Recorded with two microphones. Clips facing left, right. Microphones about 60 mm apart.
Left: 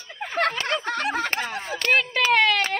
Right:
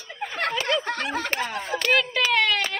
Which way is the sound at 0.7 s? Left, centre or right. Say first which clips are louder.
Even; left.